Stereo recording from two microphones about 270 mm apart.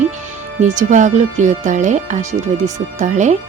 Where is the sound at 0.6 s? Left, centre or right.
Right.